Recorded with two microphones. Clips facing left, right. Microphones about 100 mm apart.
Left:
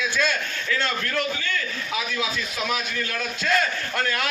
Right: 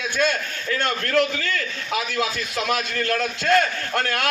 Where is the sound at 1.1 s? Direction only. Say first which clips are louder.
Right 5 dB; 75° right (ahead or behind).